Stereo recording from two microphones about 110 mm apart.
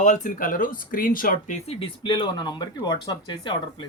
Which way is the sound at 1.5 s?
80° left.